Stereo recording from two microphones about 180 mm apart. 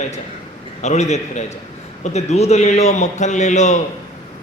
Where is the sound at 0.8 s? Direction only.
40° left (ahead or behind).